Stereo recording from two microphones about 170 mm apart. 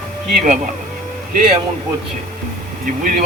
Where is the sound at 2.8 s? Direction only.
55° right (ahead or behind).